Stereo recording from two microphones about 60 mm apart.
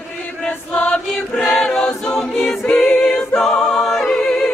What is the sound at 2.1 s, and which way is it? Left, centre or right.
A capella, centre.